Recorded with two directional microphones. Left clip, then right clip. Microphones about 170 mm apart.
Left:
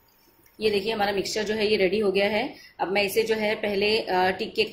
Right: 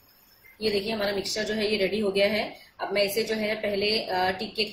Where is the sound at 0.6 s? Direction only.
50° left (ahead or behind).